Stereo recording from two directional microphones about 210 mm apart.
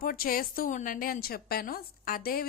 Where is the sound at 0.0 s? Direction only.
40° left (ahead or behind).